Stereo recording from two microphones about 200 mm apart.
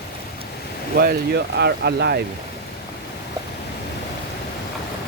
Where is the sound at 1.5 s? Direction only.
55° right (ahead or behind).